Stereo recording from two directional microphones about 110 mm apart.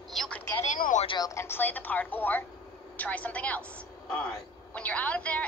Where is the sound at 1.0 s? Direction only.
40° left (ahead or behind).